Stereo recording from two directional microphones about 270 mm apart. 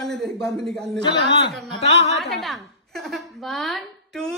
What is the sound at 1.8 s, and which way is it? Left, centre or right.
Speech, left.